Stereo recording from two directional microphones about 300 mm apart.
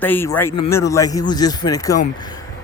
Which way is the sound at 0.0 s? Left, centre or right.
Centre.